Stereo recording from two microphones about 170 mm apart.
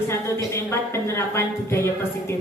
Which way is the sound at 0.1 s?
15° left (ahead or behind).